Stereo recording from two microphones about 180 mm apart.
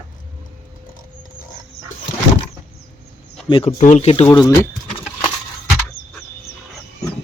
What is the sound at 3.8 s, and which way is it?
Speech, 40° left (ahead or behind).